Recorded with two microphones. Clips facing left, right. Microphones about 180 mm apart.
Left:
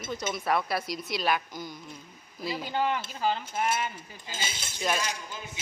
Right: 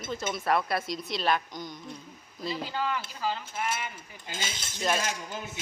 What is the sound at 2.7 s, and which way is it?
Speech, 20° left (ahead or behind).